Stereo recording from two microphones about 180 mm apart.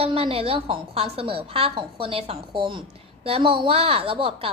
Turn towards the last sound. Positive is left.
turn(degrees=-30)  # may be behind; listen again after turning